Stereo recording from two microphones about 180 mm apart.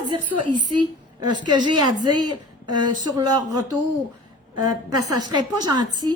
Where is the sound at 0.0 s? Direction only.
25° right (ahead or behind).